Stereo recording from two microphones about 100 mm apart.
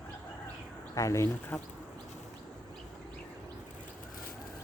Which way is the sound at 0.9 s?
30° left (ahead or behind).